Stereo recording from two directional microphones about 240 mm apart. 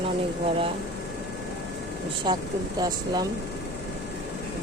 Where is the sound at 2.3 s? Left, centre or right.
Centre.